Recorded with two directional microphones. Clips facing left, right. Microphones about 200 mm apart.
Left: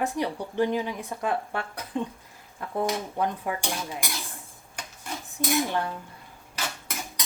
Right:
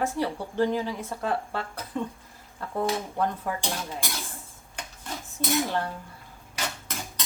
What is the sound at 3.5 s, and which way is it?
Speech, 15° left (ahead or behind).